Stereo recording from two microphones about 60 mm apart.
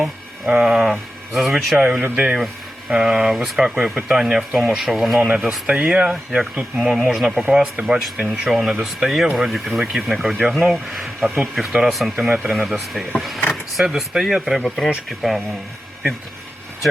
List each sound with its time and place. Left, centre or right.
0.5 s speech: centre
1.8 s speech: right; by 5.3 s centre
5.6 s speech: centre
6.7 s speech: centre